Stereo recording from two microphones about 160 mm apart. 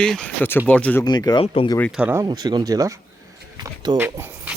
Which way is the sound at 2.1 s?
25° right (ahead or behind).